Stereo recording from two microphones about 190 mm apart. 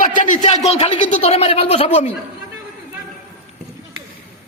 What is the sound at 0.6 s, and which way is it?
A man's voice, 30° left (ahead or behind).